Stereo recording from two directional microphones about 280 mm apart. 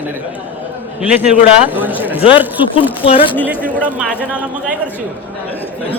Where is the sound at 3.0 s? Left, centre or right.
Centre.